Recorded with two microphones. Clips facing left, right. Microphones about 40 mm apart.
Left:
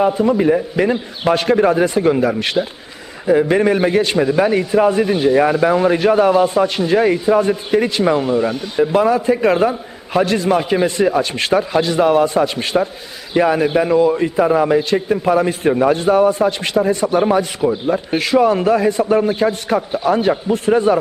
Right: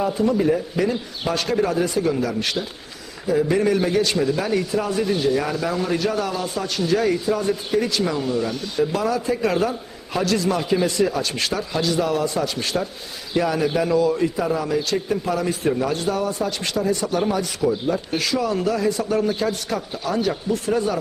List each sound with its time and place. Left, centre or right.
0.1 s a man's voice: left